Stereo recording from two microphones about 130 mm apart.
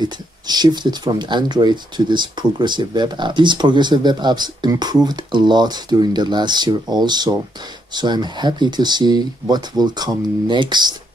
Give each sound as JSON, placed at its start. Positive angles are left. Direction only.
{"t": 0.0, "sound": "speech", "side_deg": -35}